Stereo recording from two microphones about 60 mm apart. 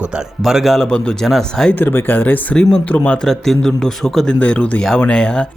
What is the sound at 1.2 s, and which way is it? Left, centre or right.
Speech, centre.